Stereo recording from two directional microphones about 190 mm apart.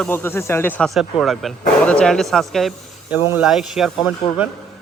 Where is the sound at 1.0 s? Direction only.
Centre (ahead or behind).